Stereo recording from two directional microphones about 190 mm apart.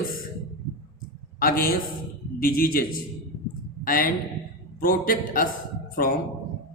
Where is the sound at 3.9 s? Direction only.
50° left (ahead or behind).